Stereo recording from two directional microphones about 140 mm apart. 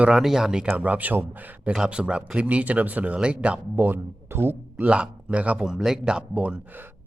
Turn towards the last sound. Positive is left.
turn(degrees=-10)  # may be behind; listen again after turning